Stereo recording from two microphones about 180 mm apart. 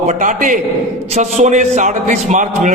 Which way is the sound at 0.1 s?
45° right (ahead or behind).